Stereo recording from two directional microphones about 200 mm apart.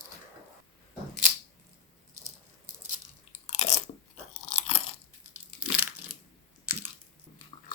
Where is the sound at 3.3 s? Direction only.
35° left (ahead or behind).